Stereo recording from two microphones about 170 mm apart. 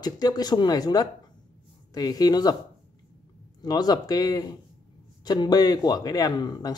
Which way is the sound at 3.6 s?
25° left (ahead or behind).